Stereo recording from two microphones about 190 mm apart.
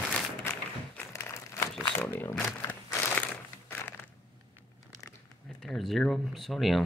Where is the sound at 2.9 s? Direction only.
10° left (ahead or behind).